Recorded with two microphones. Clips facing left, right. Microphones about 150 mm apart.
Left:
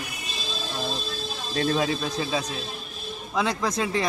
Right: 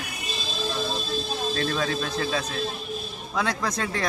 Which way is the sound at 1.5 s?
20° left (ahead or behind).